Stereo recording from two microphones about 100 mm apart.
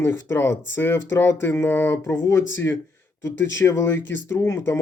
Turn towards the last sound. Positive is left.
turn(degrees=25)  # may be behind; listen again after turning